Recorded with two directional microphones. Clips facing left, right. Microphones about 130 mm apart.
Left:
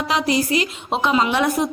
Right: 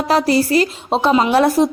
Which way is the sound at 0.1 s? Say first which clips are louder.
Right 6 dB; 40° right (ahead or behind).